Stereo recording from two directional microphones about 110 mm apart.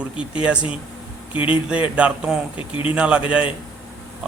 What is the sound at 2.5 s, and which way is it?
Speech, 55° left (ahead or behind).